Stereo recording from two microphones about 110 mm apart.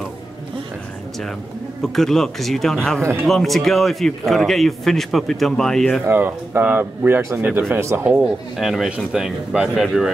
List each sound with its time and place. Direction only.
1.8 s a man's voice: 5° left (ahead or behind)
6.0 s speech: 20° right (ahead or behind)
8.1 s a man's voice: 5° right (ahead or behind)